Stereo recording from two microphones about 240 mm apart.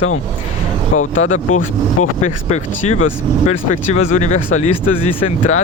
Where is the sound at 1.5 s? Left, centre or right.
Left.